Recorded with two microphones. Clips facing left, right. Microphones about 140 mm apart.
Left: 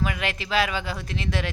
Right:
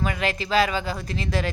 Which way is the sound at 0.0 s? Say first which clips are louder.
Right 2 dB; centre (ahead or behind).